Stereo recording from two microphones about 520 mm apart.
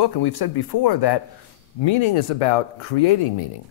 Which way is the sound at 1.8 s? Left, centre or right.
Left.